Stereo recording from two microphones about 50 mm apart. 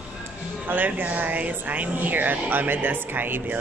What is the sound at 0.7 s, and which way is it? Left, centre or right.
Speech, right.